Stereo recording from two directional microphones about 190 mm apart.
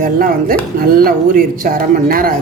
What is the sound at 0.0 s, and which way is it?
A woman's voice, 50° right (ahead or behind).